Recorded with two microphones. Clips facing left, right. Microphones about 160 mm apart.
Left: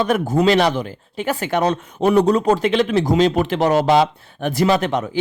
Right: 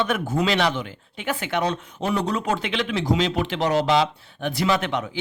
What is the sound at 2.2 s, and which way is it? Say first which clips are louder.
Speech: left 9 dB; 40° left (ahead or behind).